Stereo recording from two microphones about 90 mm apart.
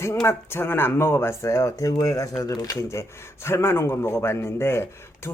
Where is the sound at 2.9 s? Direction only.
30° left (ahead or behind).